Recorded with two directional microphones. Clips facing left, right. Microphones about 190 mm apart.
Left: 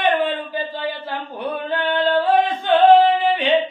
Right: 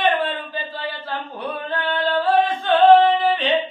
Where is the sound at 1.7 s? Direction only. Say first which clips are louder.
Left 3 dB; 15° left (ahead or behind).